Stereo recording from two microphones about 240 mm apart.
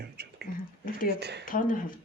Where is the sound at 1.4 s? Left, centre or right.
Left.